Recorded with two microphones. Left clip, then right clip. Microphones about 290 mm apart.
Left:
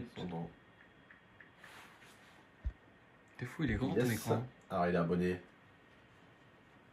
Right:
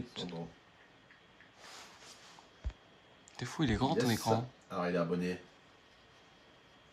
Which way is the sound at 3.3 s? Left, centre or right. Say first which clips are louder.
Right 4 dB; centre.